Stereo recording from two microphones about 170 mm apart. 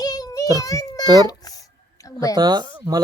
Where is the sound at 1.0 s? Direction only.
25° right (ahead or behind).